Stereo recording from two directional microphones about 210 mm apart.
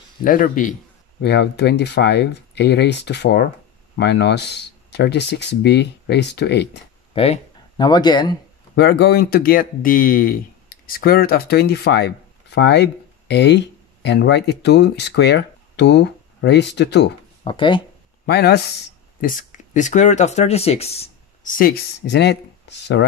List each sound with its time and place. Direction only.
0.2 s a man's voice: 40° left (ahead or behind)
1.2 s speech: 55° left (ahead or behind)
7.2 s speech: 25° left (ahead or behind)
8.7 s speech: 50° left (ahead or behind)
17.5 s speech: 25° left (ahead or behind)
18.2 s speech: 50° left (ahead or behind)
19.2 s speech: 40° left (ahead or behind)
21.5 s speech: 45° left (ahead or behind)